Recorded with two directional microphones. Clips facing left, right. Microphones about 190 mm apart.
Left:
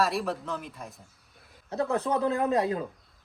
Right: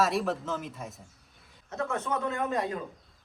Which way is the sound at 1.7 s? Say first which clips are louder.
Left 4 dB; 35° left (ahead or behind).